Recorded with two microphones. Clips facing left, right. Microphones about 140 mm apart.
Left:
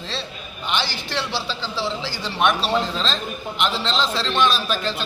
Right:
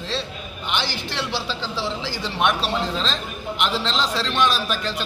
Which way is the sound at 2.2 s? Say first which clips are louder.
Left 2 dB; 15° right (ahead or behind).